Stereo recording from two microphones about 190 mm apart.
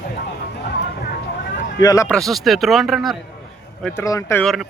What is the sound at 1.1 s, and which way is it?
Vehicle, 50° left (ahead or behind).